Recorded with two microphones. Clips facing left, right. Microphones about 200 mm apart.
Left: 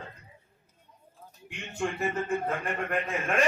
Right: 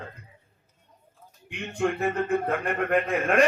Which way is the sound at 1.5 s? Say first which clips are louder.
Right 6 dB; 60° right (ahead or behind).